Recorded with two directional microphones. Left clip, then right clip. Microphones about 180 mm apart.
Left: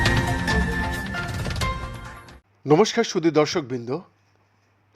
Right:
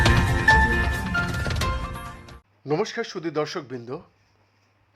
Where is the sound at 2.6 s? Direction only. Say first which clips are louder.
Left 8 dB; 30° left (ahead or behind).